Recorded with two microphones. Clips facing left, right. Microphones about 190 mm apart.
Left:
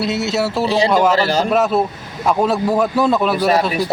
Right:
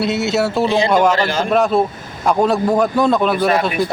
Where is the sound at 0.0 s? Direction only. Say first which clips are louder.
Right 2 dB; centre (ahead or behind).